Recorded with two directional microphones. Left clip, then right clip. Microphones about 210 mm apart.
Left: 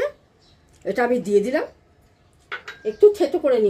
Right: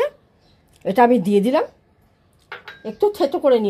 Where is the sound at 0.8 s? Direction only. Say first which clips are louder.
Right 6 dB; 35° right (ahead or behind).